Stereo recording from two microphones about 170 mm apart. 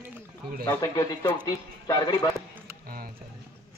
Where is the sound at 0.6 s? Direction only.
15° left (ahead or behind).